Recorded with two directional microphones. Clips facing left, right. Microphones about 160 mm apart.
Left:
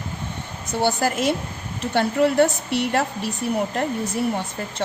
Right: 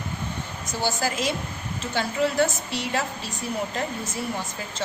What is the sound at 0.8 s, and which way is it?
A woman's voice, 60° left (ahead or behind).